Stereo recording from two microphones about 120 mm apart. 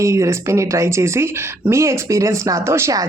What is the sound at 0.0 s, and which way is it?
Speech, 25° right (ahead or behind).